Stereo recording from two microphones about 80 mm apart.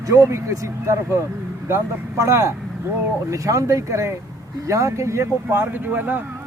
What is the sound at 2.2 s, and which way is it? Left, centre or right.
Speech, right.